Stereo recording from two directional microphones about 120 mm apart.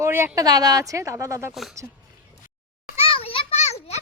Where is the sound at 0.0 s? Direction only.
20° right (ahead or behind).